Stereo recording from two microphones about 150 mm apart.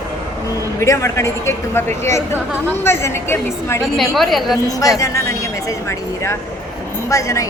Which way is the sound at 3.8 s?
Centre (ahead or behind).